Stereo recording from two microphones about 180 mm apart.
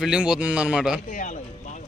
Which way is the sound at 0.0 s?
5° right (ahead or behind).